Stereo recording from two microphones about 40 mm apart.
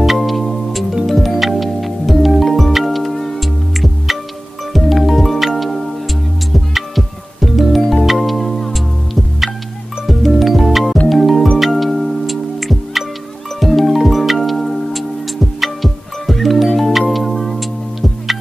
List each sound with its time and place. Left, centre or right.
0.0 s music: centre